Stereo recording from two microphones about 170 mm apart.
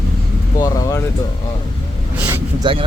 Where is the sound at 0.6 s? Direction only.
20° left (ahead or behind).